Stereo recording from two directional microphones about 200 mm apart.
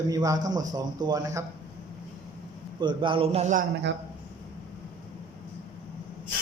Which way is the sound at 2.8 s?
25° right (ahead or behind).